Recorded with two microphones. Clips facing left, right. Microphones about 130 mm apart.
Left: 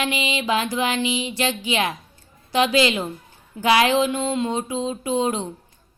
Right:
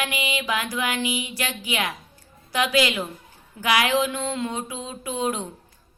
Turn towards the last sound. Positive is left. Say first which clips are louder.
# left 4 dB
turn(degrees=25)  # may be behind; listen again after turning